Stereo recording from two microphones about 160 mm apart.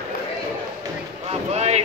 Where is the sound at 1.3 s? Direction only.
40° right (ahead or behind).